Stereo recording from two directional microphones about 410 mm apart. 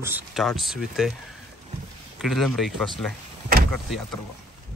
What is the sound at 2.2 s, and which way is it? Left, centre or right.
Speech, centre.